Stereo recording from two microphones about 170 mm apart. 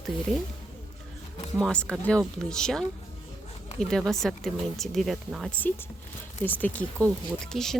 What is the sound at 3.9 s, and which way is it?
Speech, centre (ahead or behind).